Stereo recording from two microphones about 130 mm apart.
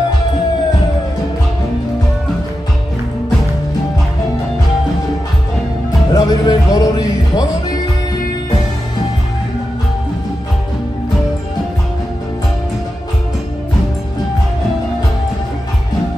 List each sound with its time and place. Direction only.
6.1 s music: 30° left (ahead or behind)